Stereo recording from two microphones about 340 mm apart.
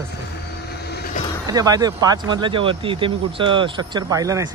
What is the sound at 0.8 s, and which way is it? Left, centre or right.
Vehicle, left.